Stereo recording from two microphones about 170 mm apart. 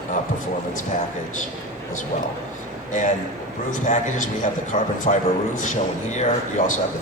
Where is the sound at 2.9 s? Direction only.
45° left (ahead or behind).